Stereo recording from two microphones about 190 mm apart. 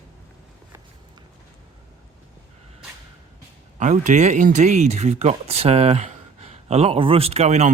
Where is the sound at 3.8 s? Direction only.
40° right (ahead or behind).